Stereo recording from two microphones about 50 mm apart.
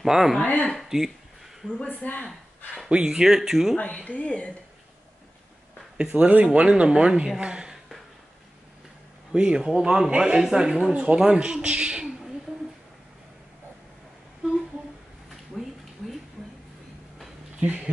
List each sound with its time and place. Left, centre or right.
0.0 s speech: centre
1.9 s speech: left
2.2 s speech: centre
2.9 s speech: right
3.2 s speech: centre
3.7 s speech: left
5.9 s speech: right
9.3 s speech: centre
10.9 s speech: right
15.6 s a sound: centre
17.6 s speech: right